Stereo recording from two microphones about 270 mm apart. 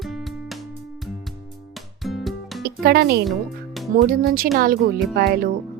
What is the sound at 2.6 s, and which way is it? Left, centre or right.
Speech, right.